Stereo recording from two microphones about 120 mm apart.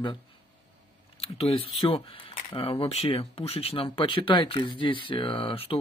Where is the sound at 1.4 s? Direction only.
50° left (ahead or behind).